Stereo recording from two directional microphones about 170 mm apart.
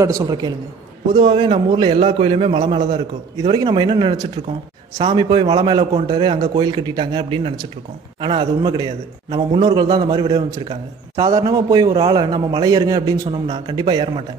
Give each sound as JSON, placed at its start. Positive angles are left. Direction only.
{"t": 0.0, "sound": "a man's voice", "side_deg": -20}